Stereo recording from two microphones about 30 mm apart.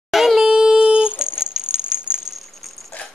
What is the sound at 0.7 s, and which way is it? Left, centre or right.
Humming, right.